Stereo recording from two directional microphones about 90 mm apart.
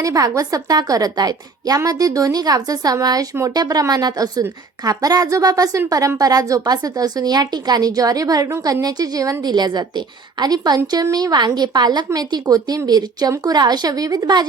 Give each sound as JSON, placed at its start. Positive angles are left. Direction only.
{"t": 0.0, "sound": "a woman's voice", "side_deg": -40}